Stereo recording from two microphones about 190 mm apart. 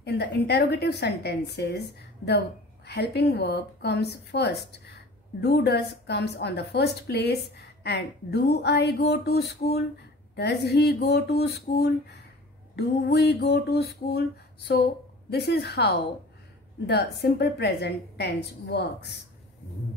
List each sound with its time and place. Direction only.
0.0 s a woman's voice: 60° left (ahead or behind)